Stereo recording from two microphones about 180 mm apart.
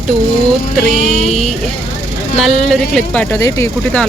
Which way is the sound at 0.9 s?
45° right (ahead or behind).